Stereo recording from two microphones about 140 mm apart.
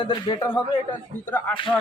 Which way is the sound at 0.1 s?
30° left (ahead or behind).